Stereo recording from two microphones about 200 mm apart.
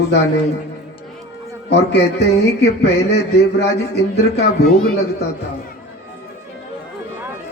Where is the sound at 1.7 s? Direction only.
55° left (ahead or behind).